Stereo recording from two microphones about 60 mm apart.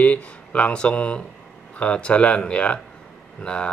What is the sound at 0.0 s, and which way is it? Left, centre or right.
Speech, left.